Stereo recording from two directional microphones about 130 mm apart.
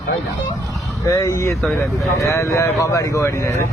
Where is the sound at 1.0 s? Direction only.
25° left (ahead or behind).